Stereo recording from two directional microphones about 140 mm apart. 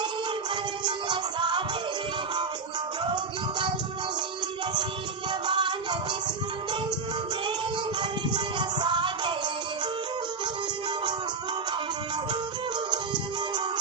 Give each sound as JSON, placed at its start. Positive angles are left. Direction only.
{"t": 0.5, "sound": "music", "side_deg": -35}
{"t": 5.3, "sound": "music", "side_deg": -35}
{"t": 7.9, "sound": "music", "side_deg": -35}